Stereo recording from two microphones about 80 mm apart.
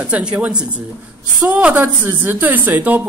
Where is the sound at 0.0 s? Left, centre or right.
Centre.